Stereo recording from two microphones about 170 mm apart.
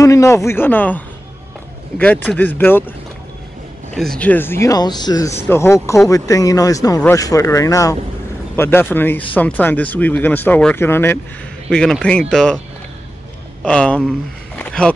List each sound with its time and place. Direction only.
0.0 s speech: 20° left (ahead or behind)
2.2 s speech: 10° left (ahead or behind)
3.9 s speech: 5° left (ahead or behind)
13.7 s speech: 5° left (ahead or behind)